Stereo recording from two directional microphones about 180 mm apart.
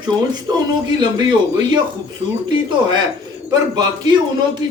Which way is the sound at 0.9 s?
25° right (ahead or behind).